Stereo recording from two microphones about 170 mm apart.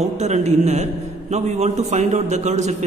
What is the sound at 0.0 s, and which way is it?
A man's voice, 40° right (ahead or behind).